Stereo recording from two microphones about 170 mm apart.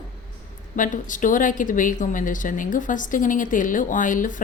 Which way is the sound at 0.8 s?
50° left (ahead or behind).